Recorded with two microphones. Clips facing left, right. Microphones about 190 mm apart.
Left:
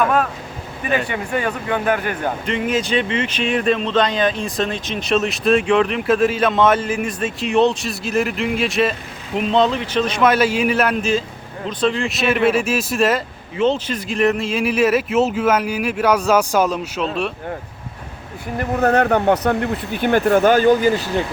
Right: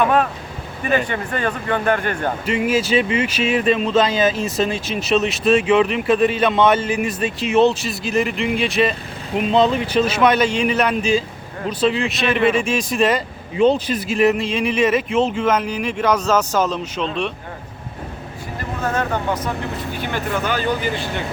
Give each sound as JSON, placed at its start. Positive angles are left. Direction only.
{"t": 0.0, "sound": "speech", "side_deg": 0}
{"t": 2.5, "sound": "speech", "side_deg": -5}
{"t": 13.6, "sound": "speech", "side_deg": -10}
{"t": 18.8, "sound": "speech", "side_deg": 65}
{"t": 20.0, "sound": "speech", "side_deg": 50}